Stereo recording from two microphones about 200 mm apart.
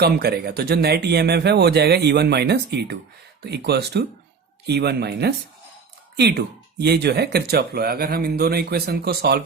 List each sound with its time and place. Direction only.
0.0 s speech: 55° right (ahead or behind)